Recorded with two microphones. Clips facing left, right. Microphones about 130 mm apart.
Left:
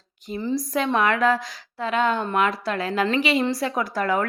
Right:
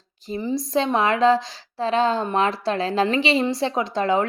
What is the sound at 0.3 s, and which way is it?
A woman's voice, 20° right (ahead or behind).